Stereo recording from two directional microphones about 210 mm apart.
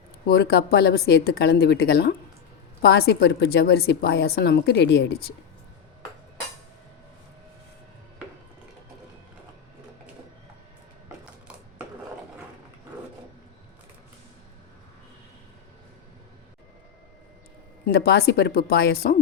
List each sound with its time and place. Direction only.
0.3 s a woman's voice: 50° left (ahead or behind)
17.8 s a woman's voice: 50° left (ahead or behind)